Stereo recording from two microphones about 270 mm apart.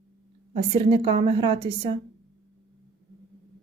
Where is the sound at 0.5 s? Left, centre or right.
Centre.